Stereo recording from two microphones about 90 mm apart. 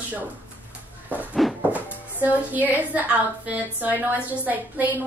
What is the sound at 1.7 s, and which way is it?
A woman's voice, 20° right (ahead or behind).